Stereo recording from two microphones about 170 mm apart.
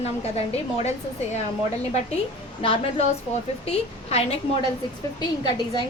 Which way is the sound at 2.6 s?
30° left (ahead or behind).